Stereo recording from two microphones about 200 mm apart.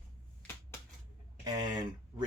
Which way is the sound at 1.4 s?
20° right (ahead or behind).